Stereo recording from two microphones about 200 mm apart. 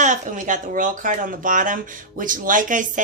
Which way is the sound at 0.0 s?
40° right (ahead or behind).